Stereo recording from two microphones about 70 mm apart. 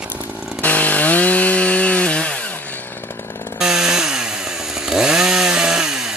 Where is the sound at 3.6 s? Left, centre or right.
Centre.